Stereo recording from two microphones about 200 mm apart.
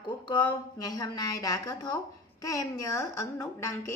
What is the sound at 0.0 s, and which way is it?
A woman's voice, 20° left (ahead or behind).